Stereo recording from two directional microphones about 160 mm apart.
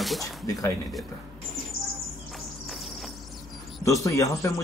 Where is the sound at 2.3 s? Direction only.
Centre (ahead or behind).